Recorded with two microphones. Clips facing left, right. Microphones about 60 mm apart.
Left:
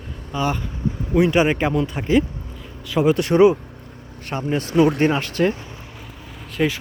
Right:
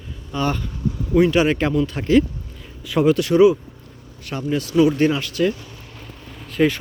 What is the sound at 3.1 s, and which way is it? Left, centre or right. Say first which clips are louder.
Speech: left 1 dB; left.